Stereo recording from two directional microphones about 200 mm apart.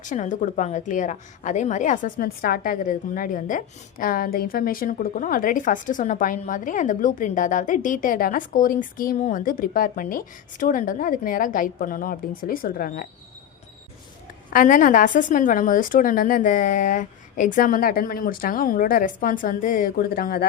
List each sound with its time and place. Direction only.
0.0 s a woman's voice: 40° left (ahead or behind)
14.5 s a woman's voice: 40° left (ahead or behind)